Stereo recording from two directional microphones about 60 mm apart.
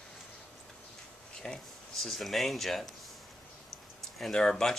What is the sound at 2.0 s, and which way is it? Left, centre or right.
Speech, centre.